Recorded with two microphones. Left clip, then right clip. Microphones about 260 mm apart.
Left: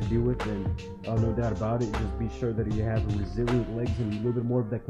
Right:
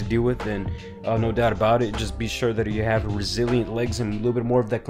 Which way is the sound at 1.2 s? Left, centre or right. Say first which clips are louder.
Right 11 dB; centre.